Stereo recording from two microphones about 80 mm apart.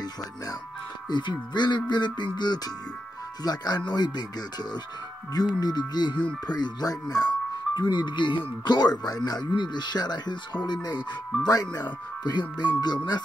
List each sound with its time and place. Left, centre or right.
1.1 s speech: left
5.6 s speech: left